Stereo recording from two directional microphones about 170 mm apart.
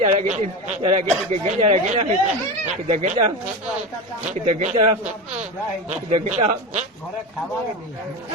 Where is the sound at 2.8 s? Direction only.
40° right (ahead or behind).